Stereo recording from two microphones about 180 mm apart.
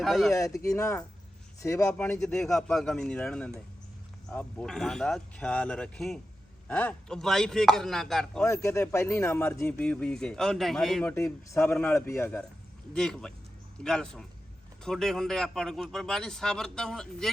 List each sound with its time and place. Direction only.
0.0 s a man's voice: centre (ahead or behind)
0.3 s a man's voice: 15° left (ahead or behind)
8.6 s speech: 15° left (ahead or behind)
11.0 s a man's voice: 15° left (ahead or behind)